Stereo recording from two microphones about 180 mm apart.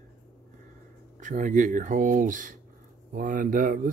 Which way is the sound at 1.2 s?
45° right (ahead or behind).